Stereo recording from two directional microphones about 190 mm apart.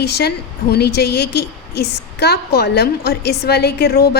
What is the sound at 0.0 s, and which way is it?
A woman's voice, 60° left (ahead or behind).